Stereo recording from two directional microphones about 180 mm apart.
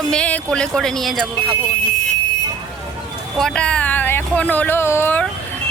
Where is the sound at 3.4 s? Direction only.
5° left (ahead or behind).